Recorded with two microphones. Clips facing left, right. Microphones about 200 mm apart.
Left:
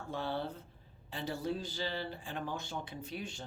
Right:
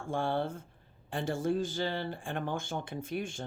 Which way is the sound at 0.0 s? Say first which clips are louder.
Right 5 dB; 50° right (ahead or behind).